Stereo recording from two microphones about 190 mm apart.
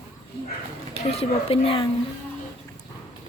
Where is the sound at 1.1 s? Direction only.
30° left (ahead or behind).